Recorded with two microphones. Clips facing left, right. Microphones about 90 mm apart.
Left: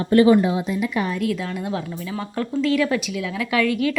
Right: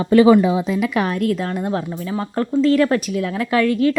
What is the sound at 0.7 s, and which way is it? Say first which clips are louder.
Speech: right 4 dB; 90° right.